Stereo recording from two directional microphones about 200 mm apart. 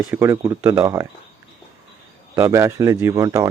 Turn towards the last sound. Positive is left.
turn(degrees=-15)  # may be behind; listen again after turning